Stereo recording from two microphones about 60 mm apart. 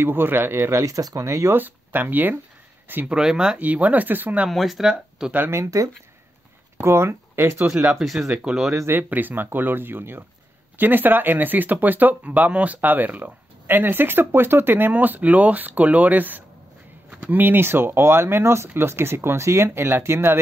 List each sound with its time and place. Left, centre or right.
0.0 s speech: right
0.7 s speech: right
1.5 s speech: right
3.1 s speech: centre
3.5 s speech: right
4.5 s speech: centre
5.5 s speech: right
6.8 s speech: right
8.0 s speech: centre
8.9 s speech: right